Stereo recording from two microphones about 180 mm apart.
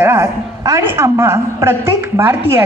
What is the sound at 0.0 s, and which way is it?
A woman's voice, 15° right (ahead or behind).